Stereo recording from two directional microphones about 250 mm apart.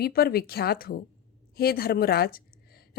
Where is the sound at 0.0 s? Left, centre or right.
Left.